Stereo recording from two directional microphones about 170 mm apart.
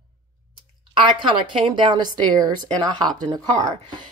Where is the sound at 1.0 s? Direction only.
30° right (ahead or behind).